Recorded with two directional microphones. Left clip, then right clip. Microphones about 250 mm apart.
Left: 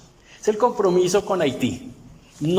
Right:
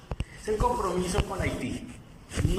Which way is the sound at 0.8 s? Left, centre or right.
Left.